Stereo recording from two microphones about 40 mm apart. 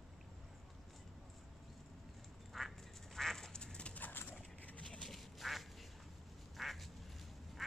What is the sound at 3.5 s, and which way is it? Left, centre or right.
Duck, left.